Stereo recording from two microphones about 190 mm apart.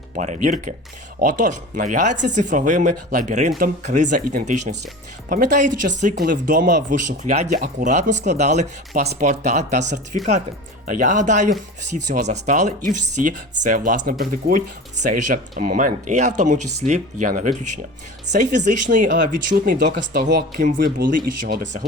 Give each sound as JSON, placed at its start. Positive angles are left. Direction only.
{"t": 0.2, "sound": "speech", "side_deg": -40}
{"t": 19.5, "sound": "speech", "side_deg": -60}
{"t": 20.7, "sound": "speech", "side_deg": -45}